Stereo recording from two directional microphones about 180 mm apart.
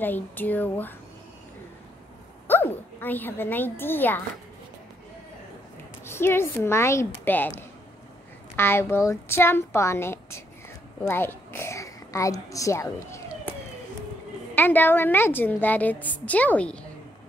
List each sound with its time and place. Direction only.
0.0 s a woman's voice: 10° left (ahead or behind)
2.4 s a woman's voice: 10° left (ahead or behind)
6.0 s a woman's voice: 15° left (ahead or behind)
14.5 s a woman's voice: 10° left (ahead or behind)